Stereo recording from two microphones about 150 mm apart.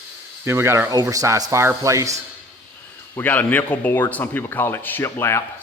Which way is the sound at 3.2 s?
10° left (ahead or behind).